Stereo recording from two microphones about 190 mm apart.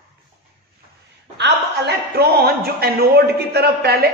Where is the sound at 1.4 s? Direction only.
55° right (ahead or behind).